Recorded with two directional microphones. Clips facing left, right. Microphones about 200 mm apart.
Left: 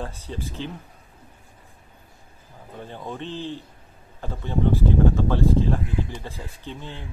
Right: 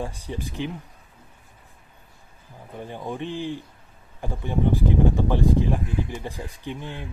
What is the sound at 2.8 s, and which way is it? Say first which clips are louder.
Speech: right 3 dB; 15° right (ahead or behind).